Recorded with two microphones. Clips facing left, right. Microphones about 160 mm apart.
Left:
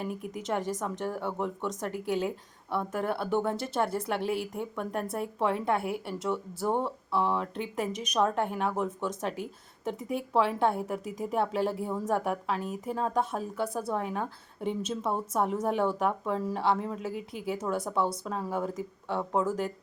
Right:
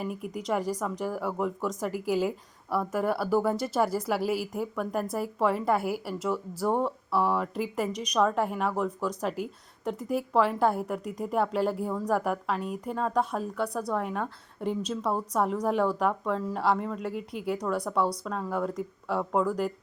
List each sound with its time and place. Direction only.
0.0 s speech: centre (ahead or behind)